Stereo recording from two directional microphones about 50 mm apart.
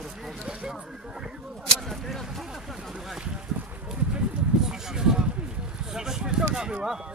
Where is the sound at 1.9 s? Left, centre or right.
Centre.